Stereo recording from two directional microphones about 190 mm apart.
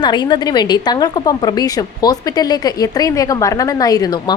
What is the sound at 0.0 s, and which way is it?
A woman's voice, 25° left (ahead or behind).